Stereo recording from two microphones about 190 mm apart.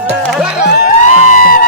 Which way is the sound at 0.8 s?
45° left (ahead or behind).